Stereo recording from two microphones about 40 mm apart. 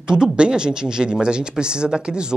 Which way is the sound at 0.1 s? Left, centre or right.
Right.